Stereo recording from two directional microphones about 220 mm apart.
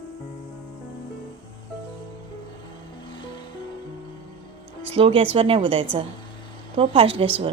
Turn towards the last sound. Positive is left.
turn(degrees=-25)  # may be behind; listen again after turning